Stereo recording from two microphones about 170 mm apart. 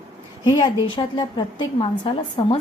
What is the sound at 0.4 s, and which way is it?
A woman's voice, 25° left (ahead or behind).